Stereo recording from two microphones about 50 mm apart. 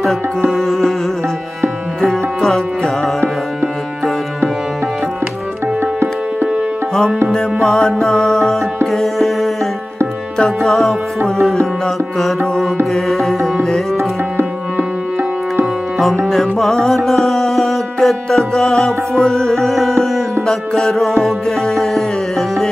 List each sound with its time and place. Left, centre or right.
0.5 s music: centre
2.0 s music: centre
5.8 s tabla: right
7.6 s music: centre
10.6 s music: centre
12.9 s music: centre
16.3 s music: centre